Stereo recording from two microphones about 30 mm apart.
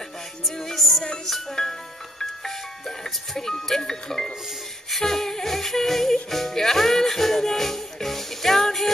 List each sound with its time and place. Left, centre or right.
0.7 s music: centre
1.5 s music: centre
3.0 s speech: centre
4.9 s music: centre